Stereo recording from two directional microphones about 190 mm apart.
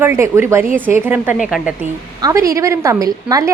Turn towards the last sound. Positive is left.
turn(degrees=-20)  # may be behind; listen again after turning